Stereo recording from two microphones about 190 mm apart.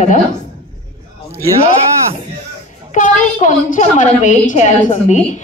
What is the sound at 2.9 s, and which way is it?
A man's voice, 40° left (ahead or behind).